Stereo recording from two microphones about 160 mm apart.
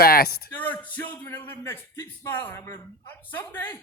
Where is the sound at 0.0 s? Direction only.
75° left (ahead or behind).